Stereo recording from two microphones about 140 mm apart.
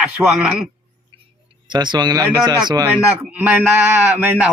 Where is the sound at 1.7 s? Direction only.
30° right (ahead or behind).